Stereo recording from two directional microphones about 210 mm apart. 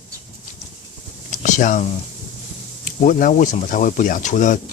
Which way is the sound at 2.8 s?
40° left (ahead or behind).